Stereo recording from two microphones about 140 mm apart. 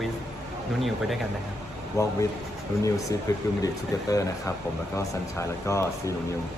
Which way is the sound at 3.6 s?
25° left (ahead or behind).